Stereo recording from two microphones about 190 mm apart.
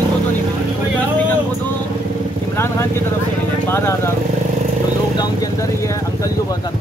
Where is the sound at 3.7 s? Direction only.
15° left (ahead or behind).